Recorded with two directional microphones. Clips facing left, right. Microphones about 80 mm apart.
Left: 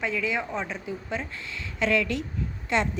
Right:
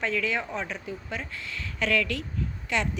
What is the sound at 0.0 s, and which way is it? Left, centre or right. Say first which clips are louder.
A woman's voice: even; centre.